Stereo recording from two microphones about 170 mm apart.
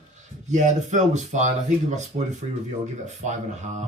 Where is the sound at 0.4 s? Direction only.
45° right (ahead or behind).